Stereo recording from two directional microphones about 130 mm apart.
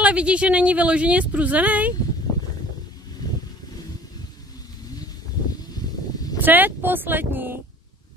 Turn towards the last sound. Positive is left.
turn(degrees=-15)  # may be behind; listen again after turning